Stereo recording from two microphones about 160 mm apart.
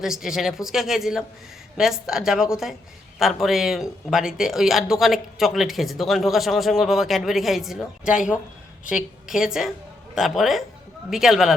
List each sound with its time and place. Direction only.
0.0 s speech: centre (ahead or behind)